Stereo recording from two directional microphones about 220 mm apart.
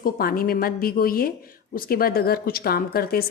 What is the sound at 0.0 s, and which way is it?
Speech, 40° left (ahead or behind).